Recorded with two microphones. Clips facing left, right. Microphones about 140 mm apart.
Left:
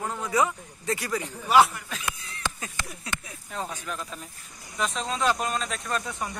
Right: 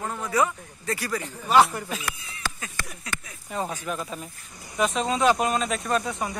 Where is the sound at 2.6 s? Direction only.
20° left (ahead or behind).